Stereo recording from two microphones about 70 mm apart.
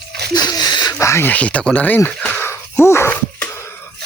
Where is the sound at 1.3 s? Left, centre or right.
Centre.